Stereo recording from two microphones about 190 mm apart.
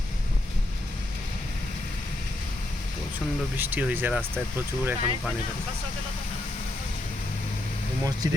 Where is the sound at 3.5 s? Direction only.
10° right (ahead or behind).